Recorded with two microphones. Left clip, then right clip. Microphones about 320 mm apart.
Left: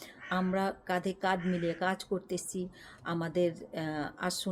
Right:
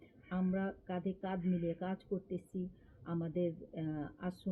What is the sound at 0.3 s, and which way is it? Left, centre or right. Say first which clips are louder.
Speech: left 8 dB; left.